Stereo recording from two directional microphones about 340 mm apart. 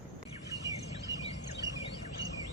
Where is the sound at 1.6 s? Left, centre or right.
Left.